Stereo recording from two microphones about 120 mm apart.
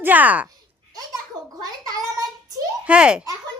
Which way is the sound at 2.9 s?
10° right (ahead or behind).